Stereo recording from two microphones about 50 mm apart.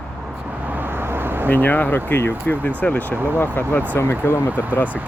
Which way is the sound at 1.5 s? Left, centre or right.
Left.